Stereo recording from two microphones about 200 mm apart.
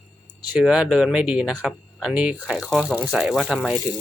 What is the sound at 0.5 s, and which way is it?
Speech, centre (ahead or behind).